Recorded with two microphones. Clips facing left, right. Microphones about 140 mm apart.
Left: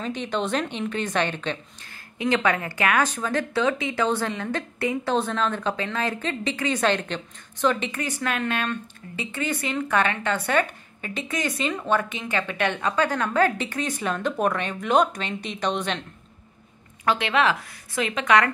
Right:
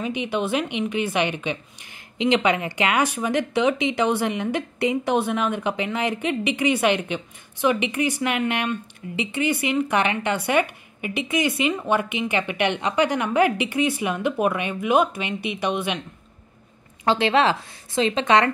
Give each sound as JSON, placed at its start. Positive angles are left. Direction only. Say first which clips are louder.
{"t": 0.0, "sound": "a woman's voice", "louder": "right 2 dB", "side_deg": -10}
{"t": 17.0, "sound": "a woman's voice", "louder": "right 3 dB", "side_deg": -30}